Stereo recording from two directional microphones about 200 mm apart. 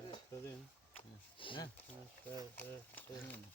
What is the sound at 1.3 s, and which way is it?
Speech, 25° left (ahead or behind).